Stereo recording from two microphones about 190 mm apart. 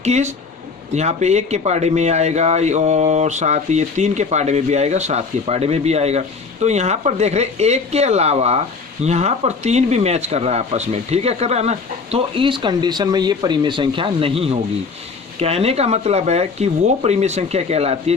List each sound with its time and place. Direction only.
0.0 s speech: 35° right (ahead or behind)